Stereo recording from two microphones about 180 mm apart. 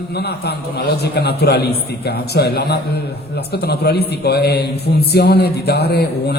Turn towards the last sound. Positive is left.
turn(degrees=65)  # may be behind; listen again after turning